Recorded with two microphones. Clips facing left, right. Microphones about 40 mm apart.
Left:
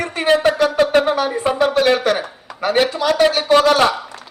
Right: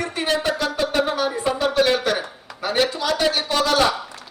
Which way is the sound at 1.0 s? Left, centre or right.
Left.